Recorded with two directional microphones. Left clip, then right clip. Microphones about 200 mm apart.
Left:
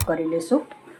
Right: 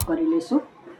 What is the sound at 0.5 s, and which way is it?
Speech, 40° left (ahead or behind).